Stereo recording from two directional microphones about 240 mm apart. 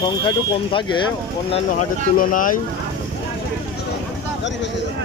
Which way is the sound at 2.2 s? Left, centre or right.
Left.